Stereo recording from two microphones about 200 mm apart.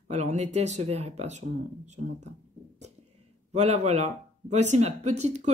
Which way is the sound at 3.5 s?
35° right (ahead or behind).